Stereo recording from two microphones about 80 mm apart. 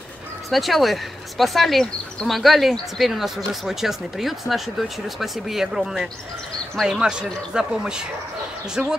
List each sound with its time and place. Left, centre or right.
0.5 s a man's voice: centre